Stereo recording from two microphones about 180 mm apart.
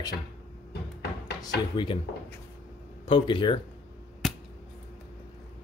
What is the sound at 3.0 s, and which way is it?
Speech, 30° left (ahead or behind).